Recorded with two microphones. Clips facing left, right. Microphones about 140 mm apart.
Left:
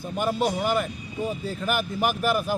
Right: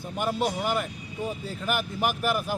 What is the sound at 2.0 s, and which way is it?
Speech, 20° right (ahead or behind).